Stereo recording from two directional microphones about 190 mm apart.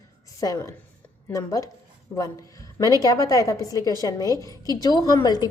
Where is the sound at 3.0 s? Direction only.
15° left (ahead or behind).